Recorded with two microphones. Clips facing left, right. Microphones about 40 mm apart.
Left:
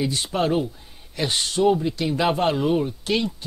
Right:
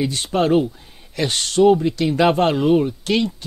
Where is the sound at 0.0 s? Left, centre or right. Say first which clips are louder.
Right 2 dB; right.